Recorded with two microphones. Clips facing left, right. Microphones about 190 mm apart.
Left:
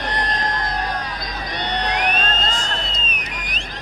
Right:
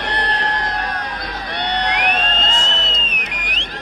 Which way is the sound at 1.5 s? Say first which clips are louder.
Right 2 dB; 65° right (ahead or behind).